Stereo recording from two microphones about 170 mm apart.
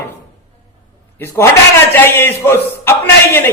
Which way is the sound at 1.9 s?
15° left (ahead or behind).